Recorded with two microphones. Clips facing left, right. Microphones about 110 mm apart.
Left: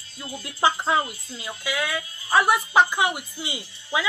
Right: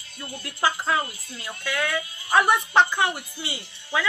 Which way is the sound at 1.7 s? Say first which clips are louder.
Right 2 dB; 5° left (ahead or behind).